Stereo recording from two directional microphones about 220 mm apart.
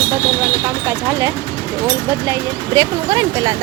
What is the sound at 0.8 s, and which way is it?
Speech, 10° right (ahead or behind).